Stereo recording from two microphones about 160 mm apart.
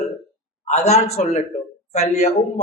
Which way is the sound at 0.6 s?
45° left (ahead or behind).